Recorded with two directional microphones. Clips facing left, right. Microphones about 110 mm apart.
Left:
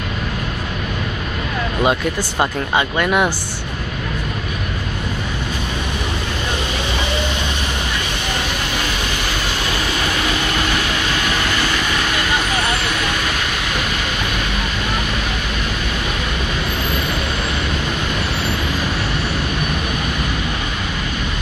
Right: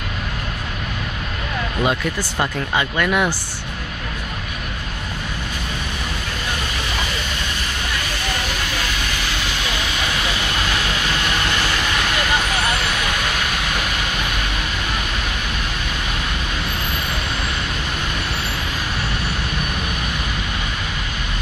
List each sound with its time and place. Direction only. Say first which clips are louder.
1.9 s speech: left 3 dB; 20° left (ahead or behind)